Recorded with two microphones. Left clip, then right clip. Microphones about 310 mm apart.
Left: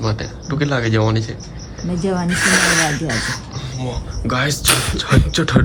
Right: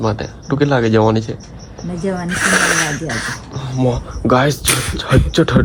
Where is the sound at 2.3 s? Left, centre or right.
Centre.